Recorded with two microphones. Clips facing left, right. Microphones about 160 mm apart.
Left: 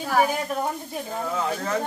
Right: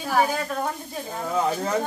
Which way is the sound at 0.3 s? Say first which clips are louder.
Left 1 dB; 15° left (ahead or behind).